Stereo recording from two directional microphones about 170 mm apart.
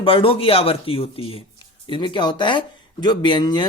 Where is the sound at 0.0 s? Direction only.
30° left (ahead or behind).